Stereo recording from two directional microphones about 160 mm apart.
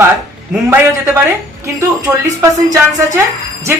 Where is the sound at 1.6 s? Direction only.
20° right (ahead or behind).